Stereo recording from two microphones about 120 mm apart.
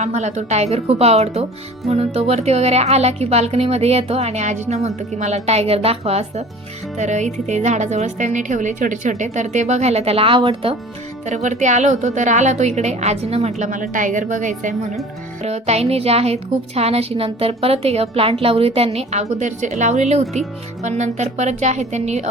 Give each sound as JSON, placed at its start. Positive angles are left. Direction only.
{"t": 0.0, "sound": "a woman's voice", "side_deg": -70}
{"t": 6.9, "sound": "a woman's voice", "side_deg": -75}
{"t": 11.3, "sound": "a woman's voice", "side_deg": -90}
{"t": 15.4, "sound": "a woman's voice", "side_deg": -65}